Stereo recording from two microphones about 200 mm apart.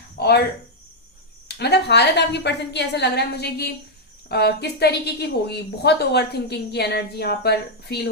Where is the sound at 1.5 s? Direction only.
55° left (ahead or behind).